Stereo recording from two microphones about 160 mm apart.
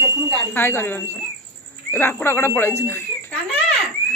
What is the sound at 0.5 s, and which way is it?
Speech, 15° left (ahead or behind).